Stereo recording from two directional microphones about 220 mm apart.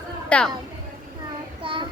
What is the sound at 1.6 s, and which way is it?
Child singing, 25° right (ahead or behind).